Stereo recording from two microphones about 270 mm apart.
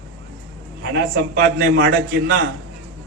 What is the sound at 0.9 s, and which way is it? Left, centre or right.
A man's voice, right.